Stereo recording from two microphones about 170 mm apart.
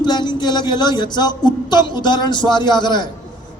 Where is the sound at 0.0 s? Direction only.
25° left (ahead or behind).